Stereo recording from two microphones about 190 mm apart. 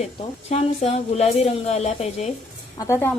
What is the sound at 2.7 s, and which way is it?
Speech, 15° left (ahead or behind).